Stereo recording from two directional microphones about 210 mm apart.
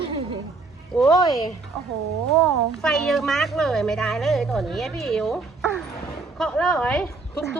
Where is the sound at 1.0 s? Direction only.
15° left (ahead or behind).